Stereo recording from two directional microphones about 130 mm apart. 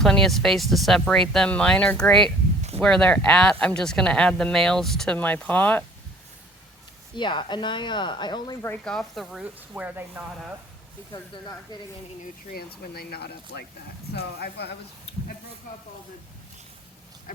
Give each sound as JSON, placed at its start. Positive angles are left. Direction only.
{"t": 0.0, "sound": "speech", "side_deg": 5}
{"t": 7.2, "sound": "speech", "side_deg": 35}
{"t": 8.8, "sound": "speech", "side_deg": 5}
{"t": 9.4, "sound": "speech", "side_deg": -10}
{"t": 11.1, "sound": "speech", "side_deg": 30}